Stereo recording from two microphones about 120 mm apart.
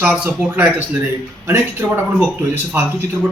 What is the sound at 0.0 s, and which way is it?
A man's voice, 15° right (ahead or behind).